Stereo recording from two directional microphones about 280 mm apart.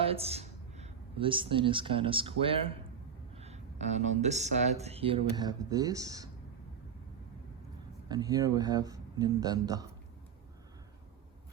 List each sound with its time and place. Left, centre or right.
0.0 s speech: right
8.0 s speech: centre